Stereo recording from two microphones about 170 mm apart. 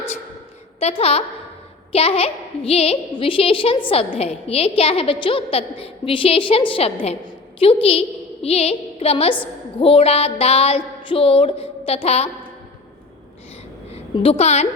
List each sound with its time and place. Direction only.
0.8 s a woman's voice: 35° left (ahead or behind)
13.9 s a woman's voice: 35° left (ahead or behind)